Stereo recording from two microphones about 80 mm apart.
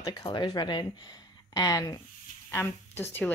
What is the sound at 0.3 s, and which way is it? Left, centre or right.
Speech, left.